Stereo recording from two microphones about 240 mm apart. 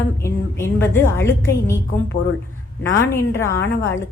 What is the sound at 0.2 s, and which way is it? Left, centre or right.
A woman's voice, centre.